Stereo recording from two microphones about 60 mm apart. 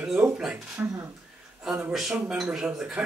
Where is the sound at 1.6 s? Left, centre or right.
Centre.